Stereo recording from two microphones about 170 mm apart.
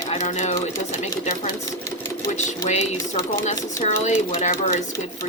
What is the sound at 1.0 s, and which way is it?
Speech, 55° left (ahead or behind).